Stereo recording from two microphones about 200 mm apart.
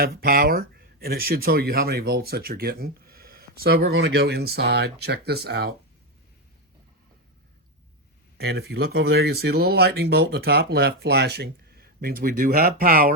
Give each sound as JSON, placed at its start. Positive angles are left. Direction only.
{"t": 0.0, "sound": "speech", "side_deg": -50}
{"t": 8.4, "sound": "speech", "side_deg": -50}